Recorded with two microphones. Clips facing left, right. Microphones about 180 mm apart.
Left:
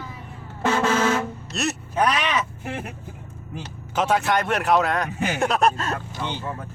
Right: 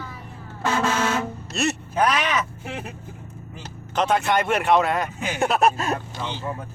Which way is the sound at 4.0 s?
5° left (ahead or behind).